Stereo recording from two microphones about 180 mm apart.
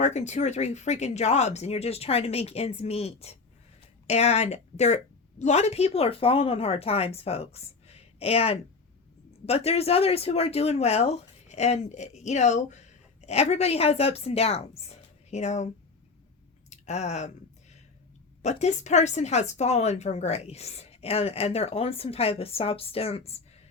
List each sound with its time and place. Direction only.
0.0 s speech: 40° left (ahead or behind)
18.4 s speech: 40° left (ahead or behind)